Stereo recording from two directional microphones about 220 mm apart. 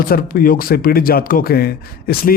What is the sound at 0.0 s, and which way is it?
Speech, 40° left (ahead or behind).